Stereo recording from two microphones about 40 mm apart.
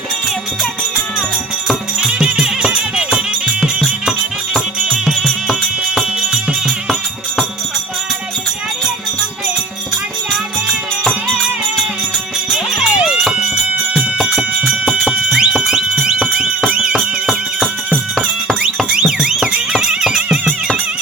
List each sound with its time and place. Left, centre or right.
2.2 s music: centre
5.0 s music: centre
12.5 s music: centre
14.2 s music: centre
18.9 s a sound: centre
19.8 s music: centre